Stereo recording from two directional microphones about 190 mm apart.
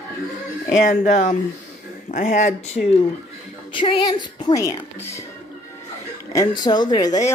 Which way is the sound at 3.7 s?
25° left (ahead or behind).